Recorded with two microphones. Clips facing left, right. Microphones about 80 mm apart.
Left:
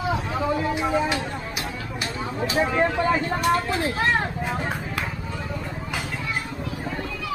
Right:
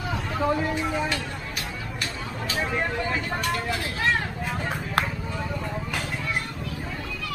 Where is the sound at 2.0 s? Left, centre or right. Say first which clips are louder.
Left 7 dB; centre.